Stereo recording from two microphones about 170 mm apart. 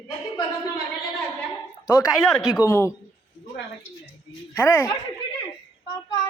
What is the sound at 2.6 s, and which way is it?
Speech, 15° left (ahead or behind).